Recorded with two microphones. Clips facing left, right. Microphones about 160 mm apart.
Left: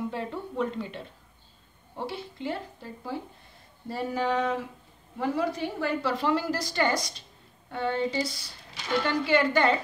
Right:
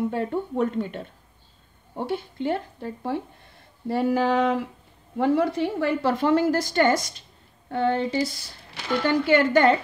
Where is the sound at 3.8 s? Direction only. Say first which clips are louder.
Right 7 dB; 70° right (ahead or behind).